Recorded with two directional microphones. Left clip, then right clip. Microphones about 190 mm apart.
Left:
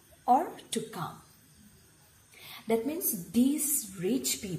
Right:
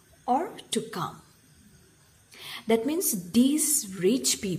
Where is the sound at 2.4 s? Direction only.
30° right (ahead or behind).